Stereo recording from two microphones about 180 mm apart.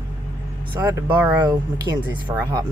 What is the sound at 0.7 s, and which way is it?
Speech, 10° right (ahead or behind).